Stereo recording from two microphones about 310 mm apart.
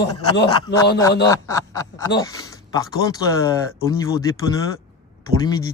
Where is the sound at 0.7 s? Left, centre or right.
Left.